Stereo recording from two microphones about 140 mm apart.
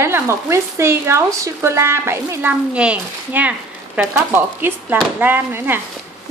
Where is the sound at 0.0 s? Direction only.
20° right (ahead or behind).